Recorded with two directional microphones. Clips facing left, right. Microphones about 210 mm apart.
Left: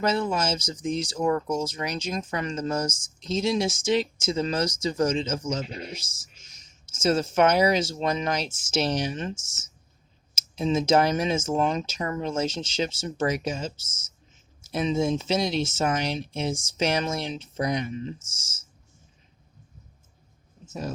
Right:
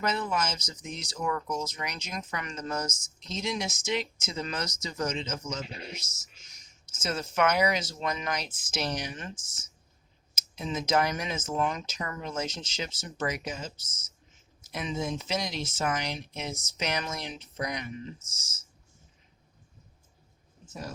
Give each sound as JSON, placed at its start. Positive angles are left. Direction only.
{"t": 0.0, "sound": "speech", "side_deg": 30}
{"t": 20.7, "sound": "speech", "side_deg": 25}